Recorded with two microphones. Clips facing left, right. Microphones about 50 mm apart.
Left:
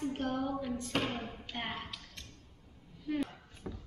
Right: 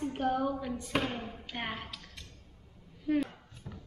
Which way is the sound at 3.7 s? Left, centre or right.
Left.